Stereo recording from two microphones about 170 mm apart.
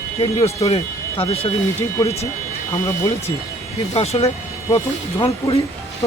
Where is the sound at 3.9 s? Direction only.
35° left (ahead or behind).